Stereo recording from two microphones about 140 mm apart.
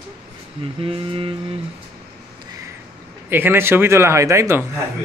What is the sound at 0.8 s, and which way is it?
Music, 40° right (ahead or behind).